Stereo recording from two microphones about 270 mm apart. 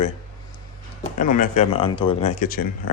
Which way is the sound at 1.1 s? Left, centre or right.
Left.